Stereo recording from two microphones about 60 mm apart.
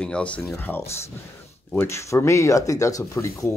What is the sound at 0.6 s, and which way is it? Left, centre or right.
Speech, left.